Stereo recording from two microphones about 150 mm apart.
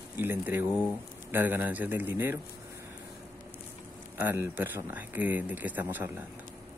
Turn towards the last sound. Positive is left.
turn(degrees=-10)  # may be behind; listen again after turning